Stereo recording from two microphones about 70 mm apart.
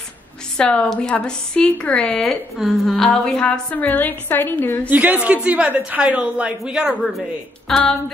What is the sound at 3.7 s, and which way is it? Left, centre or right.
A woman's voice, left.